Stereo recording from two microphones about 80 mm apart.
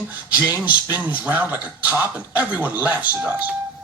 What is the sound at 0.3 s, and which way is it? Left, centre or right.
Speech, right.